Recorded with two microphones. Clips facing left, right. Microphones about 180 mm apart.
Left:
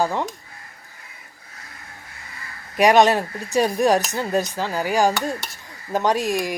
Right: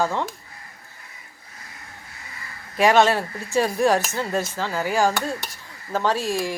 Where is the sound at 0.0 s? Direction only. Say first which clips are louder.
Left 1 dB; 15° left (ahead or behind).